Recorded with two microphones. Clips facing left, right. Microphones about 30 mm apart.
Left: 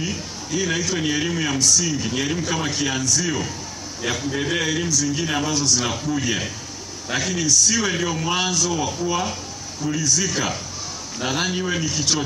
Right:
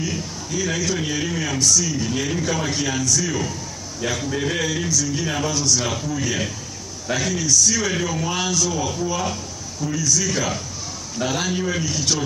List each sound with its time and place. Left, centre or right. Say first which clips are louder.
0.0 s a man's voice: right 1 dB; centre
9.8 s a man's voice: even; left